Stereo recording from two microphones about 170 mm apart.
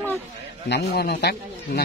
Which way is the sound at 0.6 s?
75° left (ahead or behind).